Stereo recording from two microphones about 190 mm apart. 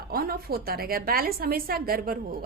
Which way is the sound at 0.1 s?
50° right (ahead or behind).